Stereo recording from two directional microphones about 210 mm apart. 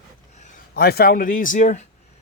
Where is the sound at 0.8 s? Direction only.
45° left (ahead or behind).